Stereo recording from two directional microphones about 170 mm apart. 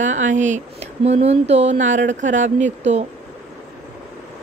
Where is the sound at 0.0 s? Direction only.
45° right (ahead or behind).